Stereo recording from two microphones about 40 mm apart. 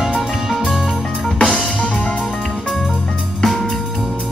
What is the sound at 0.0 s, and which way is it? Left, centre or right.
Music, centre.